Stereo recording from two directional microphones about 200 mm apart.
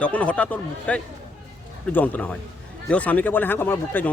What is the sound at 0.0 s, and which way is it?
Speech, 5° left (ahead or behind).